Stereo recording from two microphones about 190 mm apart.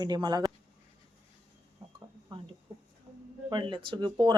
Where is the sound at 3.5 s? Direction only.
25° right (ahead or behind).